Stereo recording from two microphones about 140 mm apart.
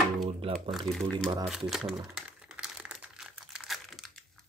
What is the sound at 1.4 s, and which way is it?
Crumpling, 5° right (ahead or behind).